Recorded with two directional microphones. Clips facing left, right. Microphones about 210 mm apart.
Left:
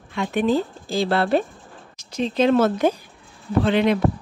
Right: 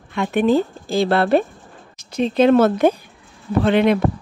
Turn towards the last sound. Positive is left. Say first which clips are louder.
# right 3 dB
turn(degrees=-55)  # may be behind; listen again after turning